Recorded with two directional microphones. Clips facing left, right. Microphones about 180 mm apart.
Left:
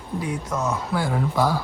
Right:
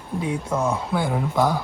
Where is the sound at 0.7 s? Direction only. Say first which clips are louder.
Right 1 dB; 20° right (ahead or behind).